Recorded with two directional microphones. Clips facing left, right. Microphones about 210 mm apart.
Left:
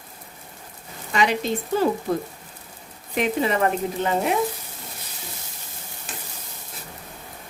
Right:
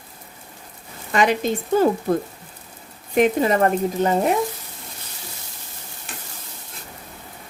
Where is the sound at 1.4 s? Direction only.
50° right (ahead or behind).